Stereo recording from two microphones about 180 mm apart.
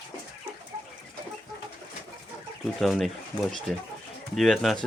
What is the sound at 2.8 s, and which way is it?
Speech, centre (ahead or behind).